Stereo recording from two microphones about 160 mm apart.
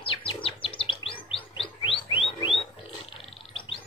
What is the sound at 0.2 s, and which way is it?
Chirp, 35° left (ahead or behind).